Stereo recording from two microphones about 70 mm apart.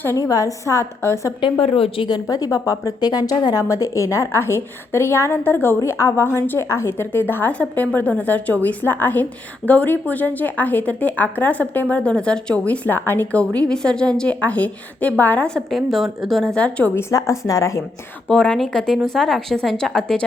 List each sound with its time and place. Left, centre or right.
0.2 s a woman's voice: left
2.2 s speech: left
3.1 s a woman's voice: left
15.4 s a woman's voice: centre
16.6 s a woman's voice: centre
16.9 s a woman's voice: left
18.3 s a woman's voice: centre